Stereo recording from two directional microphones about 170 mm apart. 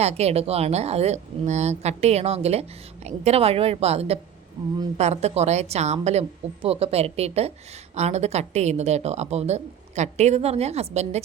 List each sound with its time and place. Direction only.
0.0 s a woman's voice: 40° right (ahead or behind)